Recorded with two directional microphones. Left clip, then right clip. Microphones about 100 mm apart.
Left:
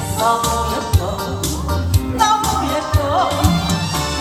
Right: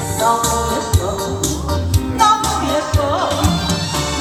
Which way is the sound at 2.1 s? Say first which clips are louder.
Right 2 dB; 35° right (ahead or behind).